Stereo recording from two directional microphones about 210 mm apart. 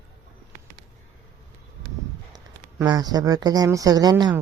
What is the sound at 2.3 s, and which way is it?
Speech, 20° right (ahead or behind).